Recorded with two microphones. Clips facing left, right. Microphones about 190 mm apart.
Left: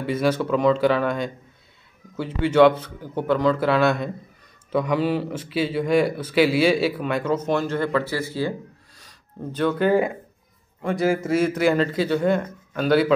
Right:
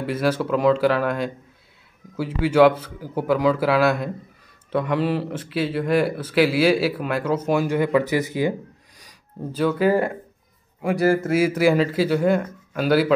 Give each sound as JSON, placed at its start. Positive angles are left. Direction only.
{"t": 0.0, "sound": "speech", "side_deg": 0}